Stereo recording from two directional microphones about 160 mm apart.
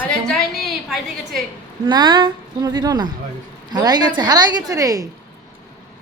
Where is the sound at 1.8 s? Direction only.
25° right (ahead or behind).